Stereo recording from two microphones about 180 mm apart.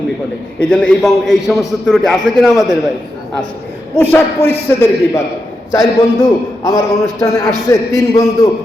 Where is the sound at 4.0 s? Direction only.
10° left (ahead or behind).